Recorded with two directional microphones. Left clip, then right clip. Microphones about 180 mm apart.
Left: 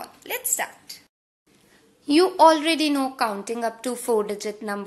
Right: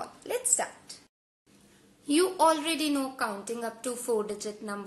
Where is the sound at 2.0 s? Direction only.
15° left (ahead or behind).